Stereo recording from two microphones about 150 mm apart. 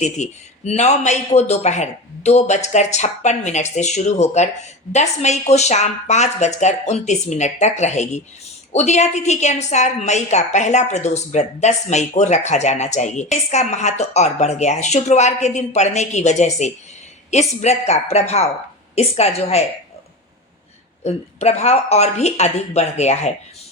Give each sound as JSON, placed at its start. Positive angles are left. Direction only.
{"t": 0.0, "sound": "speech", "side_deg": 45}
{"t": 21.0, "sound": "speech", "side_deg": 45}